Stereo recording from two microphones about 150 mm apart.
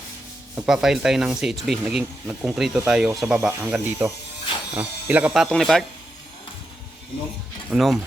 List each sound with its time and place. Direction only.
0.5 s speech: 5° right (ahead or behind)
7.7 s speech: centre (ahead or behind)